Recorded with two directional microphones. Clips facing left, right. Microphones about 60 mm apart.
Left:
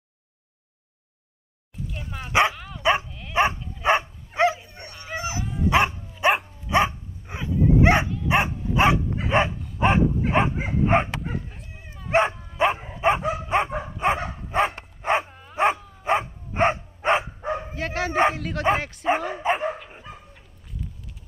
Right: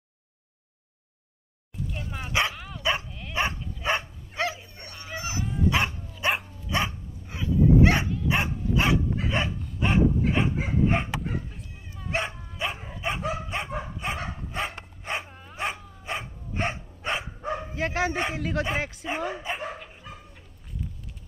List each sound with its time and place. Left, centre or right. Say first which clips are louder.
1.9 s dog: left 2 dB; centre
2.8 s dog: left 6 dB; left
3.1 s dog: even; centre
3.3 s bow-wow: left 7 dB; left
4.6 s fowl: left 2 dB; left
5.7 s dog: left 7 dB; left
12.1 s dog: left 9 dB; left
15.2 s dog: even; centre
15.5 s dog: left 10 dB; left
17.7 s bow-wow: right 1 dB; centre
18.3 s a sound: right 1 dB; centre
18.8 s speech: right 1 dB; centre
19.4 s dog: left 10 dB; left